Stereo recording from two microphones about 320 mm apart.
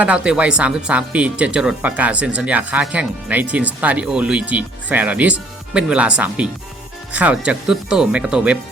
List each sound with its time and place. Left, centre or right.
0.0 s speech: centre